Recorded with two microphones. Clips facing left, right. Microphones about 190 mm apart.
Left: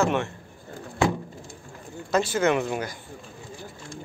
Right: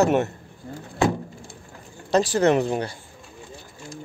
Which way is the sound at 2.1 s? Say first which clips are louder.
Right 4 dB; 35° right (ahead or behind).